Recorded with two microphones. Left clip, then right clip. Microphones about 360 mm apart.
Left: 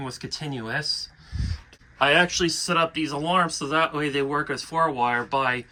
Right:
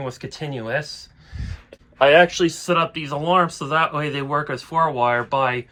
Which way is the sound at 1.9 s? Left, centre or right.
Centre.